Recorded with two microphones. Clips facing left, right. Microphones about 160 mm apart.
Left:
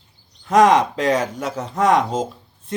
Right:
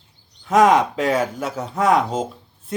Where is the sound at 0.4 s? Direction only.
Centre (ahead or behind).